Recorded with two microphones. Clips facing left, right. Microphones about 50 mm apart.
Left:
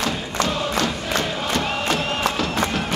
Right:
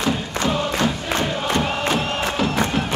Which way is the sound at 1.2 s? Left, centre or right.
Centre.